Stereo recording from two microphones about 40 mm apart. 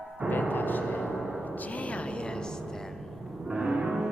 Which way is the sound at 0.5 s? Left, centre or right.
Left.